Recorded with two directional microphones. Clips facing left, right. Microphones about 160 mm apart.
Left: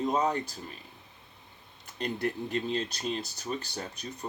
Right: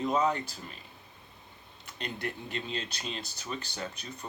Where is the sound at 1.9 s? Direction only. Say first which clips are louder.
Left 6 dB; 45° left (ahead or behind).